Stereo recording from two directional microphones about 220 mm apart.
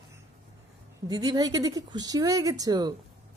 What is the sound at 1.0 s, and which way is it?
A woman's voice, 15° right (ahead or behind).